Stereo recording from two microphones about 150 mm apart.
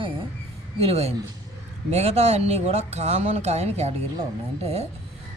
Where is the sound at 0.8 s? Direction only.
40° right (ahead or behind).